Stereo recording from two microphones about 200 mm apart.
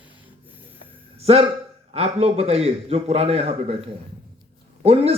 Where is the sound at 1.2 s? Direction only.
30° right (ahead or behind).